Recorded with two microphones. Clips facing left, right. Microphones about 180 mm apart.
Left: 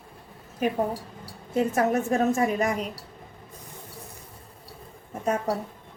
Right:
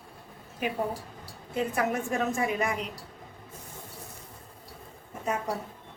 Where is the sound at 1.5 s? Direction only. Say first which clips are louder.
Left 5 dB; 40° left (ahead or behind).